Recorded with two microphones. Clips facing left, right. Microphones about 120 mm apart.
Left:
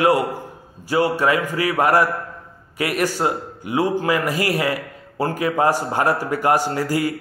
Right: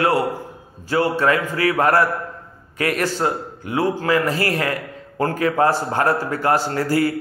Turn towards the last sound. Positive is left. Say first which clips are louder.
# right 2 dB
turn(degrees=15)  # may be behind; listen again after turning